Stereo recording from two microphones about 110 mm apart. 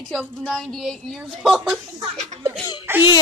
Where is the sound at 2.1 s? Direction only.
90° right.